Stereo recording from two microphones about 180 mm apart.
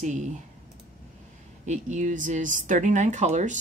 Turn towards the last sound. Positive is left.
turn(degrees=-40)  # may be behind; listen again after turning